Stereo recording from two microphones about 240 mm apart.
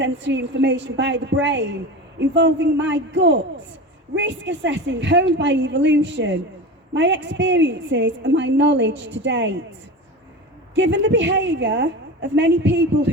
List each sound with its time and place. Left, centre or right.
0.0 s a woman's voice: right
10.8 s a woman's voice: right